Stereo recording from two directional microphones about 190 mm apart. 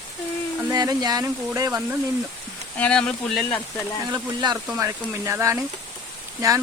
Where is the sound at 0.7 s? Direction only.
20° right (ahead or behind).